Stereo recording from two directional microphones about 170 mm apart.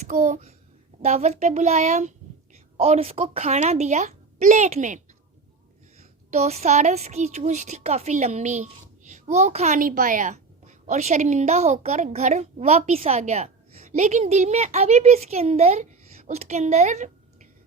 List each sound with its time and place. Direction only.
0.1 s a child's voice: 50° right (ahead or behind)